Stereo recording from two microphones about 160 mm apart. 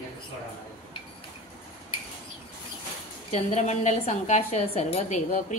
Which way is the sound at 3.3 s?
45° left (ahead or behind).